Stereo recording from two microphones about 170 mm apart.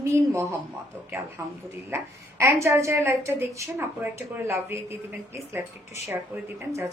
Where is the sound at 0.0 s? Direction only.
15° right (ahead or behind).